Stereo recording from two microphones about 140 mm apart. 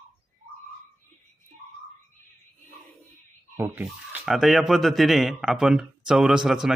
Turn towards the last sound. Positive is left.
turn(degrees=-5)  # may be behind; listen again after turning